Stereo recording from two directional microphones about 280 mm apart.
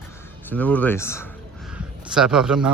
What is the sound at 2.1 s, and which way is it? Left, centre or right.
Speech, centre.